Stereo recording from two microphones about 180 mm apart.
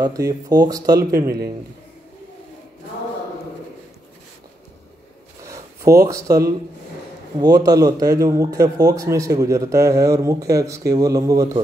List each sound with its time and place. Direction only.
0.0 s speech: 20° right (ahead or behind)
5.5 s a sound: 20° right (ahead or behind)
7.3 s speech: 20° right (ahead or behind)